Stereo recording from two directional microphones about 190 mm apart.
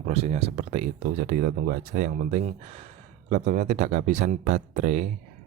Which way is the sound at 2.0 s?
40° right (ahead or behind).